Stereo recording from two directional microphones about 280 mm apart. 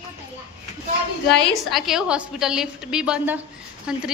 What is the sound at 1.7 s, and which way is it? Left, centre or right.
A woman's voice, centre.